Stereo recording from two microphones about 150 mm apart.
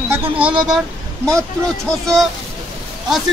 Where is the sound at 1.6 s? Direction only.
Centre (ahead or behind).